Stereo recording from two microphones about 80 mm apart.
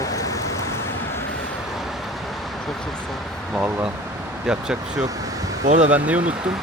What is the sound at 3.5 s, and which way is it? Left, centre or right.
Speech, centre.